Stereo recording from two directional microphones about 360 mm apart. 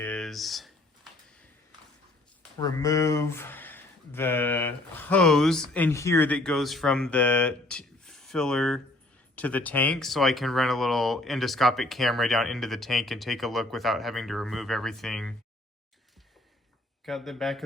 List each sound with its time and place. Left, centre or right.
0.0 s a sound: centre
2.6 s speech: centre
17.1 s speech: centre